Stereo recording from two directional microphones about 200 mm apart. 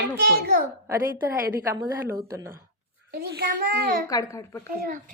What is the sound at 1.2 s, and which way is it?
A woman's voice, 15° right (ahead or behind).